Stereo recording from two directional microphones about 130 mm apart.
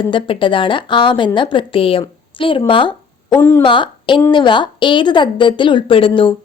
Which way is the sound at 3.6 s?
40° left (ahead or behind).